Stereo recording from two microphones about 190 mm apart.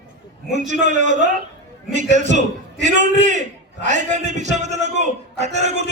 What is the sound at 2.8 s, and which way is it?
A man's voice, 40° right (ahead or behind).